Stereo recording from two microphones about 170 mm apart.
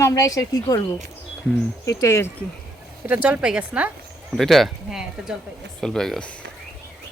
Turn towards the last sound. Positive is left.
turn(degrees=5)  # may be behind; listen again after turning